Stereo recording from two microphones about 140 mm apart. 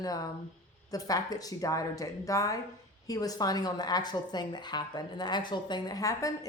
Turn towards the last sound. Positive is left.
turn(degrees=25)  # may be behind; listen again after turning